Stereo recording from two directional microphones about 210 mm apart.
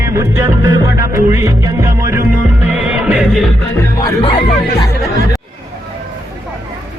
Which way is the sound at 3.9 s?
20° left (ahead or behind).